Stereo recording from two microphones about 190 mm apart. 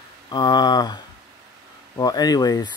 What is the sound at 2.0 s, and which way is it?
Speech, 20° left (ahead or behind).